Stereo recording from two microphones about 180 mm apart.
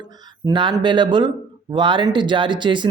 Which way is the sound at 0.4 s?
25° right (ahead or behind).